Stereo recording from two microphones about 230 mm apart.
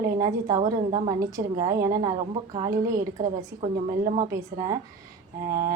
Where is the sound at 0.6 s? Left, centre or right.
Right.